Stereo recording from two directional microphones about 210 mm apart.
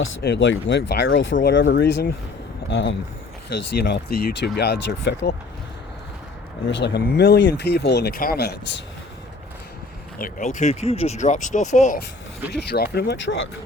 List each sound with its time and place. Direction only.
0.2 s speech: 55° left (ahead or behind)
6.7 s speech: 55° left (ahead or behind)
10.2 s speech: 40° left (ahead or behind)
12.7 s speech: 50° left (ahead or behind)